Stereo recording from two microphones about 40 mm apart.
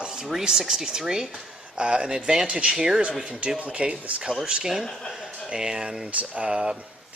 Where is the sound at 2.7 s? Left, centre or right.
Centre.